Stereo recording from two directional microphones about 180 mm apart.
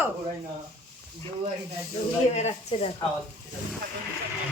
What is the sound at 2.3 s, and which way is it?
Speech, 35° left (ahead or behind).